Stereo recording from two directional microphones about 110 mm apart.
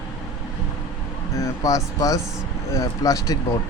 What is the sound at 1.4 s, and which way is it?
Speech, 30° left (ahead or behind).